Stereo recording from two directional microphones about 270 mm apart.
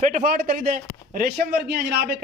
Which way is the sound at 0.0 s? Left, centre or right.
Right.